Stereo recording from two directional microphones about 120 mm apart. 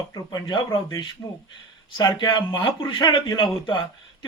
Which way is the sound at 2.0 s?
40° left (ahead or behind).